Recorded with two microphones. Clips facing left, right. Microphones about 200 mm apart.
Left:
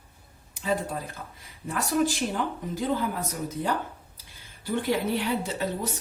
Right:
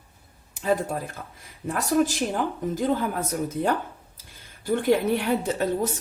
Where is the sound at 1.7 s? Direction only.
45° right (ahead or behind).